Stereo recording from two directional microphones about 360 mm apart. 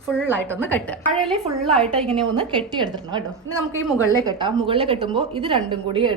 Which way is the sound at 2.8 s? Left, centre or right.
Centre.